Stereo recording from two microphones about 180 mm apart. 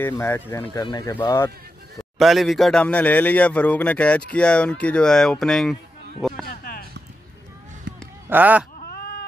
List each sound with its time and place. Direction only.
0.0 s speech: 15° left (ahead or behind)
2.1 s speech: centre (ahead or behind)
6.4 s a sound: 55° left (ahead or behind)
8.3 s speech: 10° right (ahead or behind)